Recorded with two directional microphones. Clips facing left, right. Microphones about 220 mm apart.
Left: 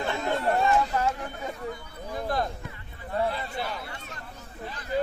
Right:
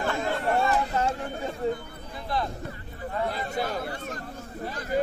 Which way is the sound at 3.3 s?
45° right (ahead or behind).